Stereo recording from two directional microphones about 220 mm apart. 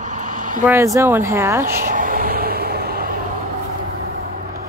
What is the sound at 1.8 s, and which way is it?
Vehicle, 40° right (ahead or behind).